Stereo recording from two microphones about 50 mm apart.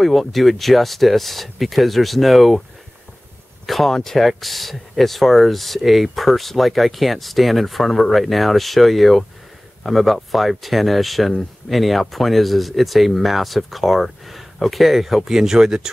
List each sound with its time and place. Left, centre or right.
0.0 s speech: centre
3.6 s speech: centre